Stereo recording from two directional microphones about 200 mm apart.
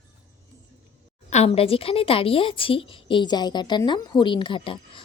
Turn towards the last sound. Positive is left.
turn(degrees=25)  # may be behind; listen again after turning